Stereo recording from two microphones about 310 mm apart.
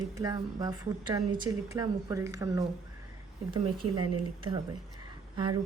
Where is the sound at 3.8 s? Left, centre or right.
Right.